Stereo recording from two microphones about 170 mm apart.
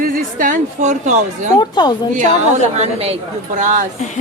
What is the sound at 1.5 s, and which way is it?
Speech, 25° left (ahead or behind).